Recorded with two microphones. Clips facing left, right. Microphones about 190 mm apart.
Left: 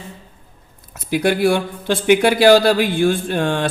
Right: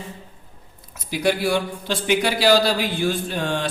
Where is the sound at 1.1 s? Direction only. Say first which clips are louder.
Left 5 dB; 55° left (ahead or behind).